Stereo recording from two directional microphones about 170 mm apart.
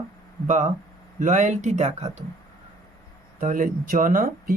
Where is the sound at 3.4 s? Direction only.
50° right (ahead or behind).